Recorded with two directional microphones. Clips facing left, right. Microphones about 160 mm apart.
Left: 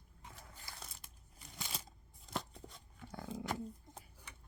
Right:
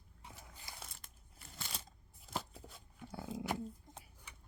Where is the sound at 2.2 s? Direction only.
5° right (ahead or behind).